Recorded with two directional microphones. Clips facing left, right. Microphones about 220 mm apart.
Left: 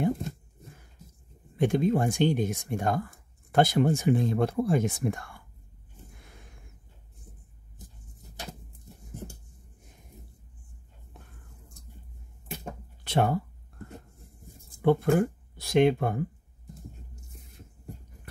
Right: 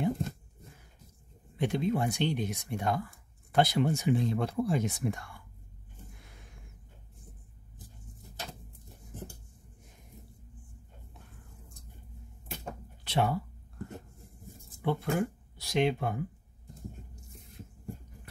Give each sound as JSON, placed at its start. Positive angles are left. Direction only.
{"t": 1.6, "sound": "speech", "side_deg": 50}
{"t": 13.0, "sound": "a sound", "side_deg": 50}
{"t": 14.8, "sound": "speech", "side_deg": 50}